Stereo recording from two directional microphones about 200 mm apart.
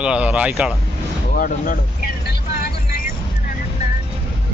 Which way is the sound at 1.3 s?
45° left (ahead or behind).